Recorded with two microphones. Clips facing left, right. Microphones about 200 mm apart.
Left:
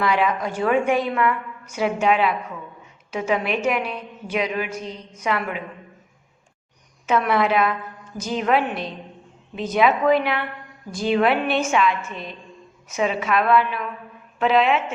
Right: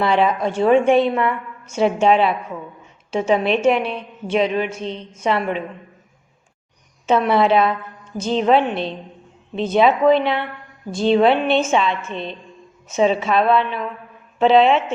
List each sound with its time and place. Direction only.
0.0 s a woman's voice: 30° right (ahead or behind)
7.1 s a woman's voice: 30° right (ahead or behind)